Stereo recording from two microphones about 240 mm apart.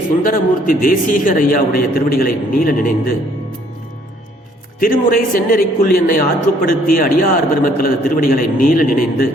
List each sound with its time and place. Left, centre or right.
0.3 s a man's voice: left
4.8 s a man's voice: left